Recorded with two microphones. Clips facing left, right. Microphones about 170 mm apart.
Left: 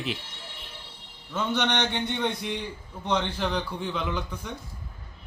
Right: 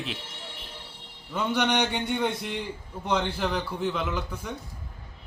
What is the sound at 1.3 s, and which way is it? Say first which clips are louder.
A man's voice: right 1 dB; 10° right (ahead or behind).